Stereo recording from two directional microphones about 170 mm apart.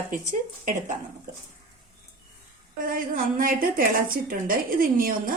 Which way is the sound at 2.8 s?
55° right (ahead or behind).